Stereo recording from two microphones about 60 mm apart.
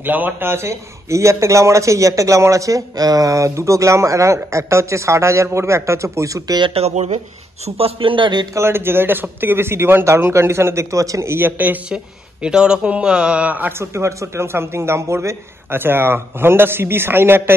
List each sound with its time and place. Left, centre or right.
0.0 s a man's voice: right
8.5 s a man's voice: right
11.3 s a man's voice: right
11.9 s speech: centre
13.7 s a man's voice: right